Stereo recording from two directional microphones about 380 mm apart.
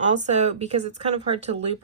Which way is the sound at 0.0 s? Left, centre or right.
Centre.